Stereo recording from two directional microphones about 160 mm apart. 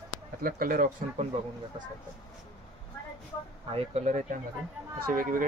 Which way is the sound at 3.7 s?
45° right (ahead or behind).